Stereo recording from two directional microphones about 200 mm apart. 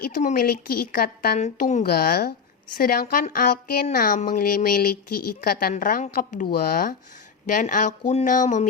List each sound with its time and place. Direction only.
0.1 s a woman's voice: 40° left (ahead or behind)
1.4 s speech: 35° left (ahead or behind)
1.8 s a woman's voice: 50° left (ahead or behind)